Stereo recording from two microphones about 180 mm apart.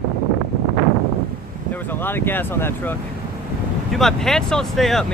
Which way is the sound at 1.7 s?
10° left (ahead or behind).